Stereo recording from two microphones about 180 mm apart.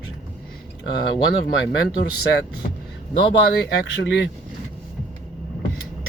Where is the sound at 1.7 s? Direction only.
65° left (ahead or behind).